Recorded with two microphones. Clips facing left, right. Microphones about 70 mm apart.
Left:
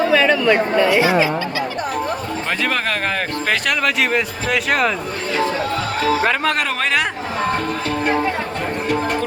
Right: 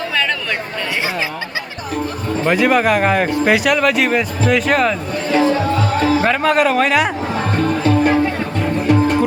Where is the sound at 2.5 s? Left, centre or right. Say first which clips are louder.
Right 8 dB; centre.